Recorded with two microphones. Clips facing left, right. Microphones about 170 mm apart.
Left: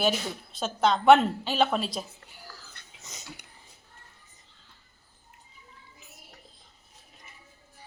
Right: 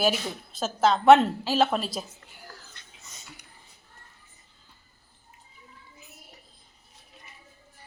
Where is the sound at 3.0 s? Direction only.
85° left.